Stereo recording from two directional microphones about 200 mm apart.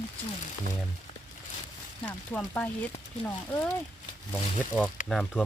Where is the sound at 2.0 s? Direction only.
5° left (ahead or behind).